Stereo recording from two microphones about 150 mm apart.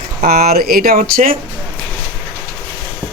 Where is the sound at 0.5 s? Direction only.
75° right (ahead or behind).